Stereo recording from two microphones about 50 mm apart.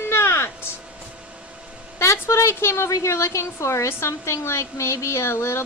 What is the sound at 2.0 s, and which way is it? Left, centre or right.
A woman's voice, left.